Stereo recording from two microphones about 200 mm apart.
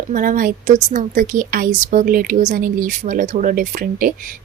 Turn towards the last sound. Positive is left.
turn(degrees=-45)  # may be behind; listen again after turning